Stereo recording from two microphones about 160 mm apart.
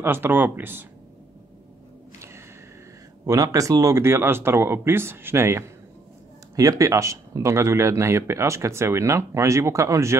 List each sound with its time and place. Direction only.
0.0 s speech: 15° right (ahead or behind)
2.1 s a sound: 15° right (ahead or behind)
3.3 s speech: 20° right (ahead or behind)